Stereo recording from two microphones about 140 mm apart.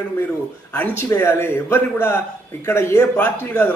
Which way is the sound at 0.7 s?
15° left (ahead or behind).